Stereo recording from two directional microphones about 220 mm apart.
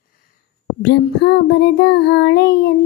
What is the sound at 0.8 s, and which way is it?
Child singing, 50° left (ahead or behind).